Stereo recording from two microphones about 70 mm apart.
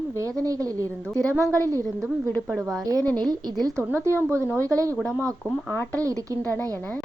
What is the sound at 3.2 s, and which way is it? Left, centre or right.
Speech, right.